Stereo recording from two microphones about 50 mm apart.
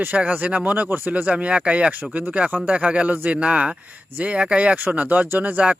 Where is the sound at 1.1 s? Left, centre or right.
Right.